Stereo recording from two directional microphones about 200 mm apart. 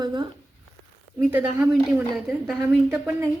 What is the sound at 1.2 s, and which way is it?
A woman's voice, 10° right (ahead or behind).